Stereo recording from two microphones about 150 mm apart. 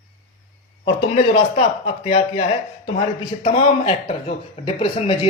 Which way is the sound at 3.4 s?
40° left (ahead or behind).